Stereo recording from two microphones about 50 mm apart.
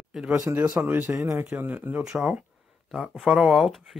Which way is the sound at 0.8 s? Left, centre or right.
Right.